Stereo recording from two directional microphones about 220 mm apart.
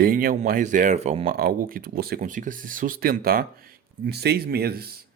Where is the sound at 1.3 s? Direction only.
40° right (ahead or behind).